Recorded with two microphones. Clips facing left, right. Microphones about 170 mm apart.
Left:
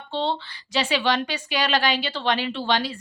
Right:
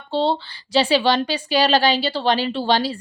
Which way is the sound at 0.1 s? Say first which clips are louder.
Right 6 dB; 35° right (ahead or behind).